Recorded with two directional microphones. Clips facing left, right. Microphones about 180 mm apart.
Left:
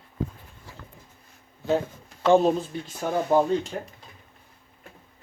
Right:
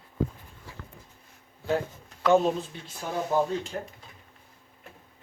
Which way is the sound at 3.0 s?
50° left (ahead or behind).